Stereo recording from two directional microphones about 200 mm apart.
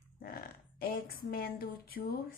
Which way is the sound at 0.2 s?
50° left (ahead or behind).